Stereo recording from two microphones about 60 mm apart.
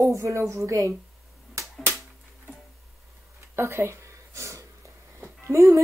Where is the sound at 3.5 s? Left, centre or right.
Right.